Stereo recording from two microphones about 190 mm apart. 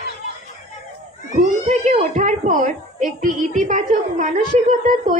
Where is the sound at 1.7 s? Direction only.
40° right (ahead or behind).